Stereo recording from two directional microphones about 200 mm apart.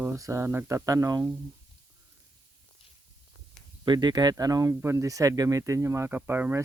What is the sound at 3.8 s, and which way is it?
Speech, 20° right (ahead or behind).